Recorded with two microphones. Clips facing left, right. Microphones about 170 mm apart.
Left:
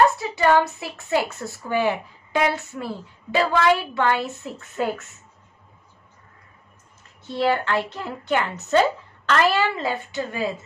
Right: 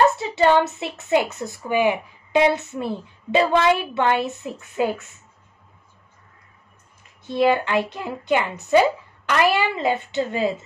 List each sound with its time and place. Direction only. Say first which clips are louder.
0.2 s a woman's voice: right 2 dB; 25° right (ahead or behind)
7.0 s a woman's voice: right 4 dB; 15° right (ahead or behind)